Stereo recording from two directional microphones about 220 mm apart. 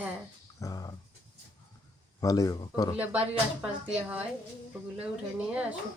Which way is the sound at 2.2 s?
15° left (ahead or behind).